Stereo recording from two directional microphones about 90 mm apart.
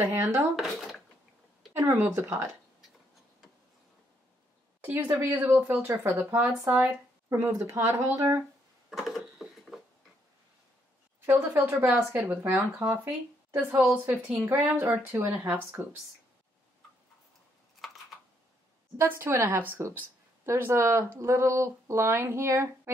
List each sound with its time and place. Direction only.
0.0 s speech: 35° right (ahead or behind)
0.6 s speech: centre (ahead or behind)
1.7 s speech: 25° right (ahead or behind)
5.0 s speech: 30° right (ahead or behind)
5.3 s speech: 20° right (ahead or behind); by 8.4 s 40° right (ahead or behind)
8.9 s a sound: centre (ahead or behind)
11.1 s speech: 25° right (ahead or behind)
18.9 s speech: 25° right (ahead or behind)